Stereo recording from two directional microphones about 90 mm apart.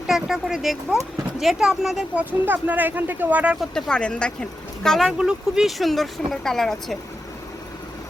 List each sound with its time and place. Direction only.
0.1 s speech: 5° right (ahead or behind)
2.4 s speech: 20° right (ahead or behind)
3.6 s speech: 5° left (ahead or behind)
5.1 s speech: 10° right (ahead or behind)